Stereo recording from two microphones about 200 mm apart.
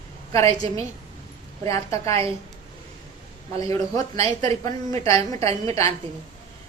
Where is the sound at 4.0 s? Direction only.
35° right (ahead or behind).